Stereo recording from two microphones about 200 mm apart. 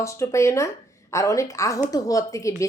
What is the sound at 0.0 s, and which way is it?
A woman's voice, 15° left (ahead or behind).